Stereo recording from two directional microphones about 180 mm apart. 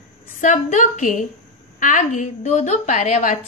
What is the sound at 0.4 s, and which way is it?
A woman's voice, 45° left (ahead or behind).